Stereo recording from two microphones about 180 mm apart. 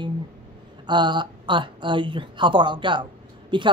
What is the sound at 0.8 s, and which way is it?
Speech, 25° right (ahead or behind).